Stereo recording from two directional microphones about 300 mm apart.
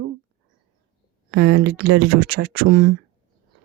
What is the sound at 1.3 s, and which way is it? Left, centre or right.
A woman's voice, right.